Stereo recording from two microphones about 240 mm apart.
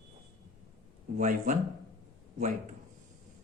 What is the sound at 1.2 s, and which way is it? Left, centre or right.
Speech, right.